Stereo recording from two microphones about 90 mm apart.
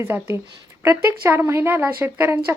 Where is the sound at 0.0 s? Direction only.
30° right (ahead or behind).